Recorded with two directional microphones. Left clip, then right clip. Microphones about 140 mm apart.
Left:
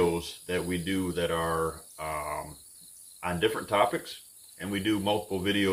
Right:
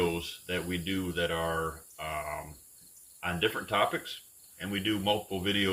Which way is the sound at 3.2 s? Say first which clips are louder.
Left 2 dB; 30° left (ahead or behind).